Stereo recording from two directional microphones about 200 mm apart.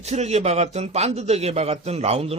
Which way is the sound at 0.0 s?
35° right (ahead or behind).